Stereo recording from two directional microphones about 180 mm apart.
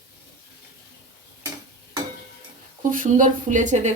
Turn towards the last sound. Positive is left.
turn(degrees=-40)  # may be behind; listen again after turning